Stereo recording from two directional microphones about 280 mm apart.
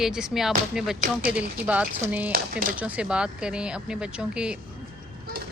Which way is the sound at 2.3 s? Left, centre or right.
Right.